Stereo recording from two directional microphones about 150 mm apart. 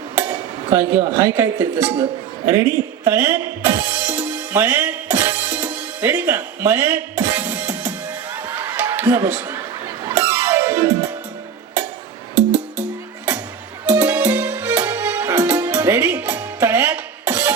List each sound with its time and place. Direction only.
0.7 s speech: 15° right (ahead or behind)
2.5 s music: 20° right (ahead or behind)
8.4 s a sound: 15° right (ahead or behind)
10.1 s music: 20° right (ahead or behind)
13.8 s music: 15° right (ahead or behind)